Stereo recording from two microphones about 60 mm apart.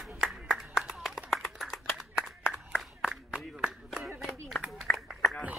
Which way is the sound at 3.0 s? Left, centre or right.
Centre.